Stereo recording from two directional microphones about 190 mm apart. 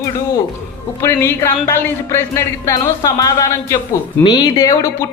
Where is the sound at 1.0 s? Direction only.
15° left (ahead or behind).